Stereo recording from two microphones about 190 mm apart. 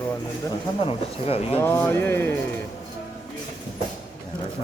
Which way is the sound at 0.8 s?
30° left (ahead or behind).